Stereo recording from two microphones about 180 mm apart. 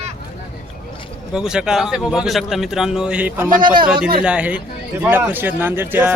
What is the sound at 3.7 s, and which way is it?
Speech, 25° right (ahead or behind).